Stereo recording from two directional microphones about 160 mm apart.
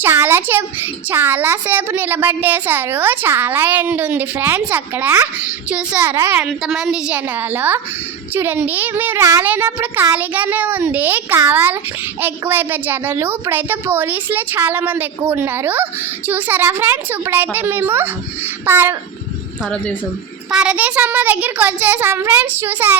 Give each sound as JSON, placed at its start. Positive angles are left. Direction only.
{"t": 0.0, "sound": "a sound", "side_deg": -15}
{"t": 1.1, "sound": "a woman's voice", "side_deg": -10}
{"t": 19.6, "sound": "a woman's voice", "side_deg": 10}
{"t": 20.5, "sound": "a woman's voice", "side_deg": -5}